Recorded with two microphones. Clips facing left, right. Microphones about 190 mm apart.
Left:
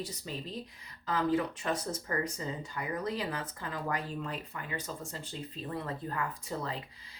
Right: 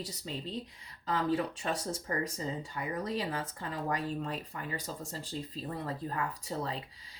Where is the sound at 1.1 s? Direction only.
35° right (ahead or behind).